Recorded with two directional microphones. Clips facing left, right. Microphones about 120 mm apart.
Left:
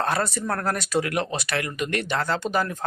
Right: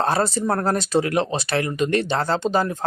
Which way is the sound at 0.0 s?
30° right (ahead or behind).